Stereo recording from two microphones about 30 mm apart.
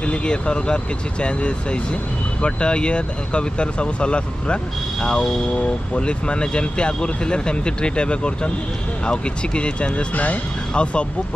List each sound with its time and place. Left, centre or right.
0.0 s speech: left
10.1 s speech: left
10.7 s speech: left